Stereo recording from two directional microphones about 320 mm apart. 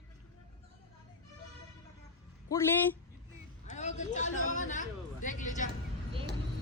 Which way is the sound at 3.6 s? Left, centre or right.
Left.